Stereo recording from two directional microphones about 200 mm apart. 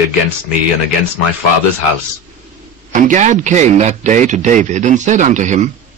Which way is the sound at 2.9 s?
40° right (ahead or behind).